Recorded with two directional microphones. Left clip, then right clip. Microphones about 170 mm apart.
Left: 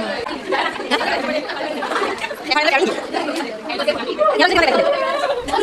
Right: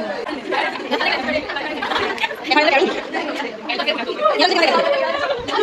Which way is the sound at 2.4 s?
Centre (ahead or behind).